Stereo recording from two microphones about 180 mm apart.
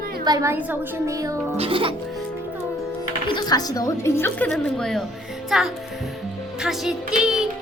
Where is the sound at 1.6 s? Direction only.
30° right (ahead or behind).